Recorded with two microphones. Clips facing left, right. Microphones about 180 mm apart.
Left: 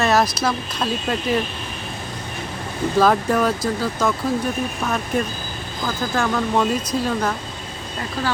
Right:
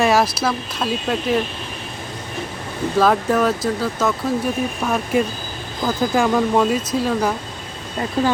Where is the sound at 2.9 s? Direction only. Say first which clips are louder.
Right 1 dB; centre (ahead or behind).